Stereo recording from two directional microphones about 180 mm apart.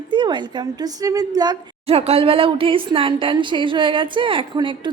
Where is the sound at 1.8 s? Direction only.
35° right (ahead or behind).